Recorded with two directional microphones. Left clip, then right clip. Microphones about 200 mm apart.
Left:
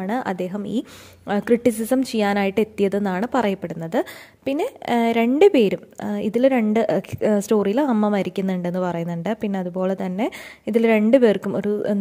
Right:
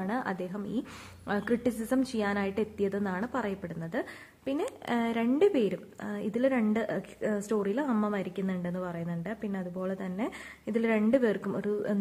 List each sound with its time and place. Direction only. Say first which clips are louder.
0.0 s a woman's voice: left 9 dB; 35° left (ahead or behind)